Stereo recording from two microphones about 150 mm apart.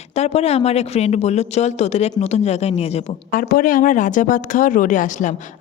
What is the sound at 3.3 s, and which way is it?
Speech, 70° left (ahead or behind).